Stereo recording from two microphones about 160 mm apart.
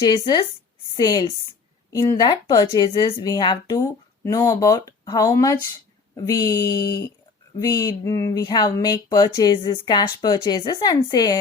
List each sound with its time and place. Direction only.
0.0 s speech: 25° left (ahead or behind)